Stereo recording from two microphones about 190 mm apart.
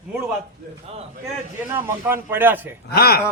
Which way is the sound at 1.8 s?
10° right (ahead or behind).